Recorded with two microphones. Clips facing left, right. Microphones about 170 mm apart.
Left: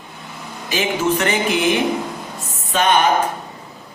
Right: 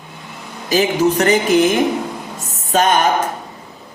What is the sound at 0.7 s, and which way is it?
Speech, 40° right (ahead or behind).